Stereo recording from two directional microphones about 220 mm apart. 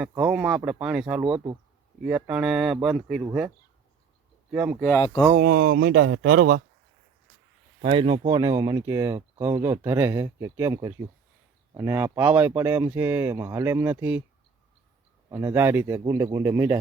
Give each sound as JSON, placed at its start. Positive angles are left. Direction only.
{"t": 0.1, "sound": "speech", "side_deg": -5}
{"t": 2.0, "sound": "speech", "side_deg": -5}
{"t": 4.5, "sound": "speech", "side_deg": -5}
{"t": 5.4, "sound": "speech", "side_deg": -45}
{"t": 7.8, "sound": "speech", "side_deg": -25}
{"t": 15.3, "sound": "speech", "side_deg": -10}